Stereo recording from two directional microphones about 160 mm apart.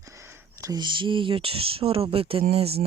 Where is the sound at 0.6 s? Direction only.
25° right (ahead or behind).